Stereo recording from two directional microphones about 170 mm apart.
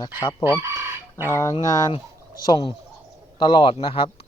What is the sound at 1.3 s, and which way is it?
Speech, 15° left (ahead or behind).